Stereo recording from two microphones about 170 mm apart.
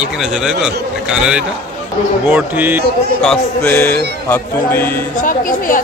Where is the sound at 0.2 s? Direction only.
5° right (ahead or behind).